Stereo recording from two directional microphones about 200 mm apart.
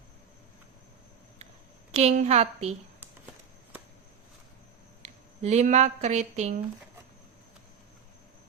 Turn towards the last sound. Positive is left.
turn(degrees=-35)  # may be behind; listen again after turning